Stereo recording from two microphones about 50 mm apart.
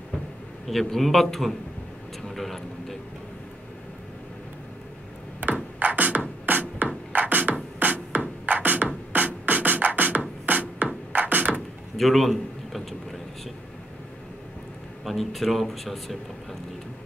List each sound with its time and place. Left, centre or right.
0.7 s speech: centre
2.2 s vehicle: centre
5.4 s music: right
9.1 s beatboxing: right
10.4 s music: right
12.0 s a man's voice: centre
15.0 s speech: centre